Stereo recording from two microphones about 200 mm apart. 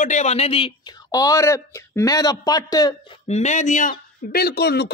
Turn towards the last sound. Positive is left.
turn(degrees=55)  # may be behind; listen again after turning